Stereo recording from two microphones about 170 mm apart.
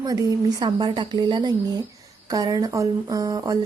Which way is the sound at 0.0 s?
20° right (ahead or behind).